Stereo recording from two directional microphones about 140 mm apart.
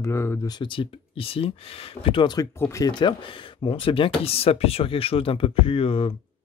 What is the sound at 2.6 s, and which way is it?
Speech, 25° left (ahead or behind).